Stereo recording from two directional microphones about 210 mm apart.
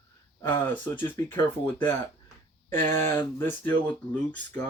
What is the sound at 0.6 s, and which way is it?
Speech, 10° left (ahead or behind).